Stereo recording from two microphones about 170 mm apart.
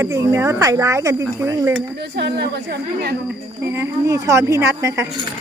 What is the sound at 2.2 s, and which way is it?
Speech, 70° right (ahead or behind).